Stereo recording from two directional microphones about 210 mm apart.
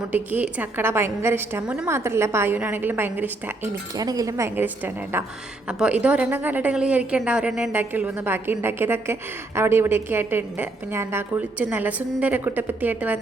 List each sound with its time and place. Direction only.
0.1 s a woman's voice: 10° right (ahead or behind)